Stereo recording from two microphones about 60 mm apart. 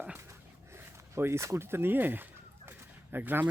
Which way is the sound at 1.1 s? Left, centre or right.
Right.